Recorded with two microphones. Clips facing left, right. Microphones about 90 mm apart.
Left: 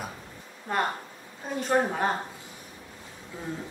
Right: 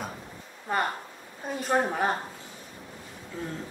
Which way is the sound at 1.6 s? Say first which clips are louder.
Left 1 dB; centre (ahead or behind).